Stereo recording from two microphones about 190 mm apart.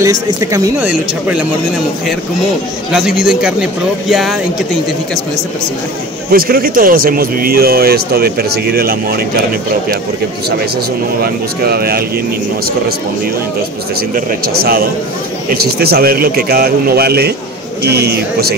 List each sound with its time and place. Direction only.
0.0 s speech: 15° right (ahead or behind)
2.9 s a man's voice: 5° right (ahead or behind)
6.3 s speech: 50° right (ahead or behind)
11.6 s speech: 55° right (ahead or behind)
14.1 s speech: 50° right (ahead or behind)